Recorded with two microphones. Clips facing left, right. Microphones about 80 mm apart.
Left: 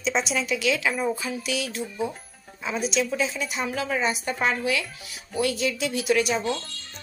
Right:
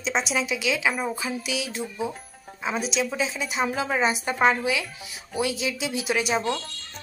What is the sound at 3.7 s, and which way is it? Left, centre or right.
A woman's voice, right.